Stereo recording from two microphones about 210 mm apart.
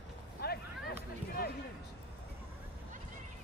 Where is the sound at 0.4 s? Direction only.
50° left (ahead or behind).